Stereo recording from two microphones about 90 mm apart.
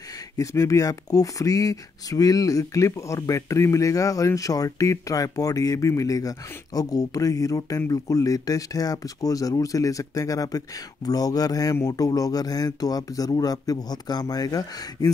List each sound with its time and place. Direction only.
0.4 s speech: 35° left (ahead or behind)